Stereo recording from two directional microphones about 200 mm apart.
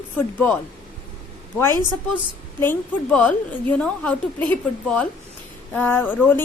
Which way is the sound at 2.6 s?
10° left (ahead or behind).